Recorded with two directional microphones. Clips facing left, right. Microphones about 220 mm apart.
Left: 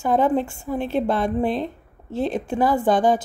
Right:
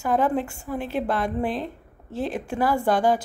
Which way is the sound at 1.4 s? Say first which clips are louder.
Left 4 dB; 5° right (ahead or behind).